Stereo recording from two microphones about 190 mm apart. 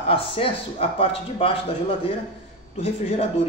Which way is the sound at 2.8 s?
30° left (ahead or behind).